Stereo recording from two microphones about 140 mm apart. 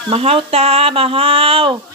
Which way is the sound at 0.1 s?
45° right (ahead or behind).